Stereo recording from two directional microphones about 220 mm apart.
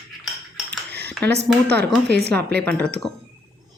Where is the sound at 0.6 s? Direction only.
50° right (ahead or behind).